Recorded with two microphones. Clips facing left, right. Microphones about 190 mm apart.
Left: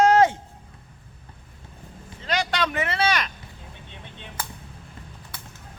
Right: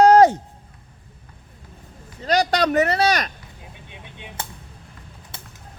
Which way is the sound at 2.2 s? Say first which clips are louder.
Right 7 dB; 40° right (ahead or behind).